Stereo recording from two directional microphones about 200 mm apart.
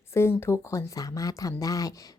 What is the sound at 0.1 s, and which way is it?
Speech, 10° left (ahead or behind).